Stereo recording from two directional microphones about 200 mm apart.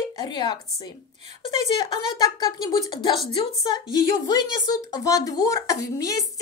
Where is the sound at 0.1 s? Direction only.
20° left (ahead or behind).